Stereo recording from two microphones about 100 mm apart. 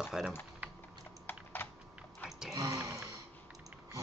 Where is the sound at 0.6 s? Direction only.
15° right (ahead or behind).